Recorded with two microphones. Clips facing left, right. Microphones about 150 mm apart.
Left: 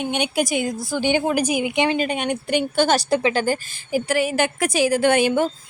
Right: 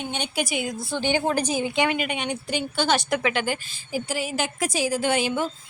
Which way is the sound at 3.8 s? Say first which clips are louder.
Left 7 dB; 60° left (ahead or behind).